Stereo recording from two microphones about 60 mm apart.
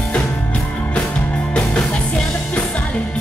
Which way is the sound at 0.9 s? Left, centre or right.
Centre.